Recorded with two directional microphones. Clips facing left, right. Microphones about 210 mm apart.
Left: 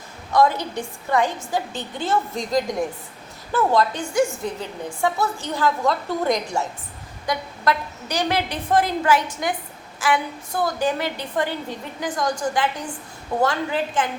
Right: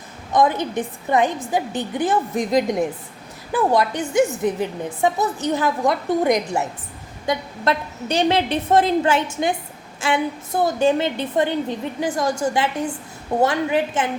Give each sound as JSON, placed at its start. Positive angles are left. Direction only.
{"t": 0.3, "sound": "a woman's voice", "side_deg": -20}